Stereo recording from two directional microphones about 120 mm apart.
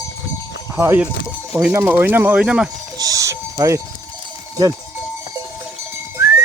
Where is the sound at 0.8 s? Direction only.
20° right (ahead or behind).